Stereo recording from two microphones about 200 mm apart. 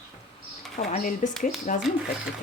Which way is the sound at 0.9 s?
40° left (ahead or behind).